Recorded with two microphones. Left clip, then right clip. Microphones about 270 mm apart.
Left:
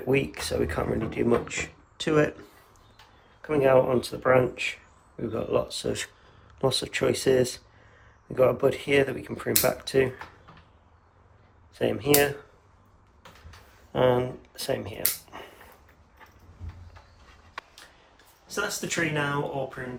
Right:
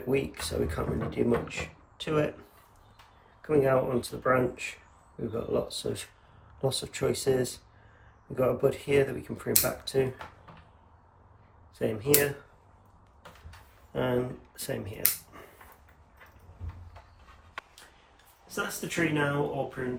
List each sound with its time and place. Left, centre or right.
0.1 s speech: left
3.4 s speech: left
11.7 s speech: left
13.9 s speech: left
18.4 s speech: centre